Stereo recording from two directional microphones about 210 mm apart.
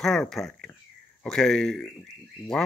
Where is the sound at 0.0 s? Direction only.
Centre (ahead or behind).